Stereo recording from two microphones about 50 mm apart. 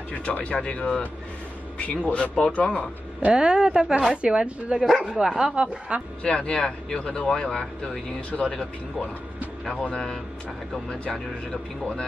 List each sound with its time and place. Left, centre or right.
0.1 s speech: left
3.3 s speech: centre
4.8 s speech: centre
5.9 s speech: right
6.2 s speech: centre
9.7 s speech: centre